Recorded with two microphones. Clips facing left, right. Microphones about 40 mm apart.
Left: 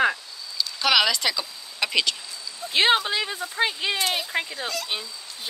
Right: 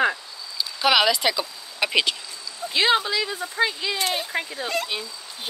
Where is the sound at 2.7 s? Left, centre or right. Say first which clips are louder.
Even; left.